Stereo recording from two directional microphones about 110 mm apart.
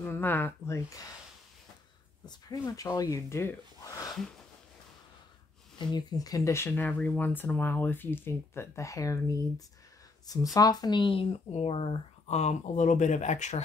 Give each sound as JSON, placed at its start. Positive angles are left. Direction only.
{"t": 0.0, "sound": "speech", "side_deg": 20}
{"t": 2.2, "sound": "speech", "side_deg": 35}
{"t": 5.8, "sound": "speech", "side_deg": 45}
{"t": 11.2, "sound": "speech", "side_deg": 70}